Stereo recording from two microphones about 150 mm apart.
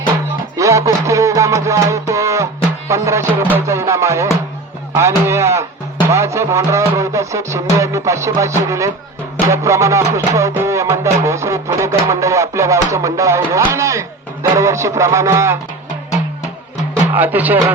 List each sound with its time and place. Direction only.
0.5 s music: 20° right (ahead or behind)
17.2 s music: 10° right (ahead or behind)